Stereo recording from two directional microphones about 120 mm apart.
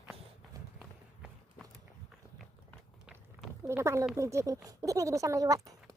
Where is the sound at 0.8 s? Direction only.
5° left (ahead or behind).